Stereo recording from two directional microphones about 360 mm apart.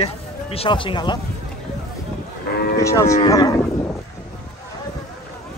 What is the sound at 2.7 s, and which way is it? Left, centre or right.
Cattle, centre.